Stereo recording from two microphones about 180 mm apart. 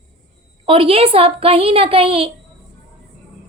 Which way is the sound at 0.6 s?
30° right (ahead or behind).